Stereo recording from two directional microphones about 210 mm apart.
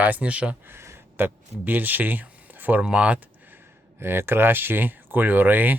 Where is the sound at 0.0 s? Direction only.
5° right (ahead or behind).